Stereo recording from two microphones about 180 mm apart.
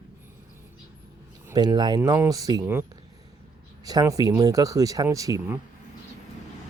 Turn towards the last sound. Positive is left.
turn(degrees=-20)  # may be behind; listen again after turning